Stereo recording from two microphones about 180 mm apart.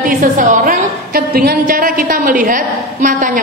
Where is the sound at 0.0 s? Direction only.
50° right (ahead or behind).